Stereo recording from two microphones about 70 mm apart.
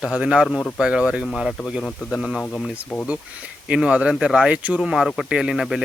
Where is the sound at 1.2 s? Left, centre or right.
Centre.